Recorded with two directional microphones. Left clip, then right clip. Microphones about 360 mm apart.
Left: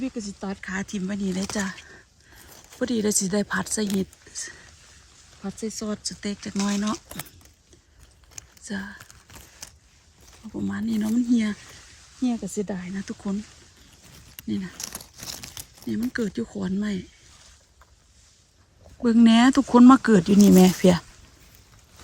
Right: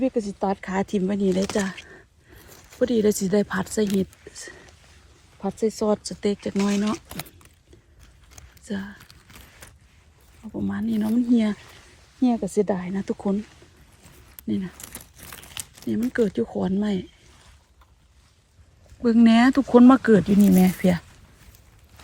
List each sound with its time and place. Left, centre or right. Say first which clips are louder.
0.2 s speech: right 9 dB; centre
1.3 s speech: right 8 dB; right
1.5 s speech: right 4 dB; centre
5.5 s speech: right 10 dB; centre
8.6 s speech: even; centre
10.5 s speech: right 1 dB; centre
12.2 s speech: right 6 dB; centre
14.4 s speech: right 3 dB; centre
15.9 s speech: right 5 dB; centre
19.0 s speech: even; centre